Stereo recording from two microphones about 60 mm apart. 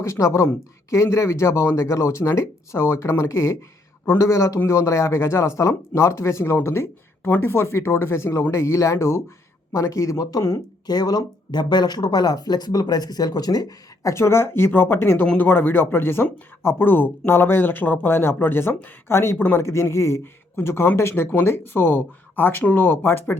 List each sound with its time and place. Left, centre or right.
0.0 s speech: left
7.3 s speech: left
7.5 s speech: left
11.0 s speech: left
14.1 s speech: left
19.6 s speech: left
20.6 s speech: left